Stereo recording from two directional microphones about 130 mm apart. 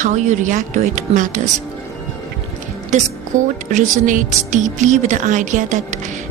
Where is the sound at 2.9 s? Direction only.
65° right (ahead or behind).